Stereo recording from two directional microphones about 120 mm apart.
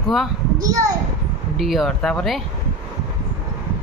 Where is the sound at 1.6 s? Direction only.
Centre (ahead or behind).